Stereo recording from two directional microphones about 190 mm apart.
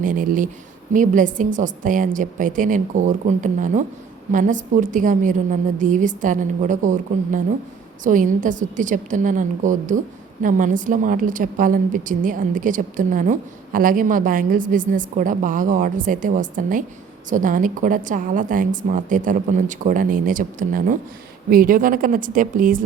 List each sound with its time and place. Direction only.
0.0 s a woman's voice: 45° right (ahead or behind)